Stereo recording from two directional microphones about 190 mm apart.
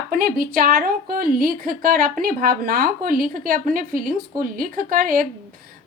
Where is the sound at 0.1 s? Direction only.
50° right (ahead or behind).